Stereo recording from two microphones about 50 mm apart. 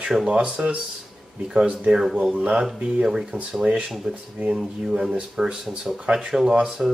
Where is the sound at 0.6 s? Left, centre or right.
Right.